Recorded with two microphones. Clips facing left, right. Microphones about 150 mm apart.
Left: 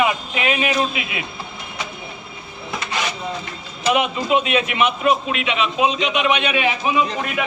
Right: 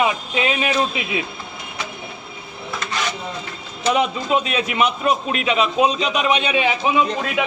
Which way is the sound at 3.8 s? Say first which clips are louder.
Even; 35° right (ahead or behind).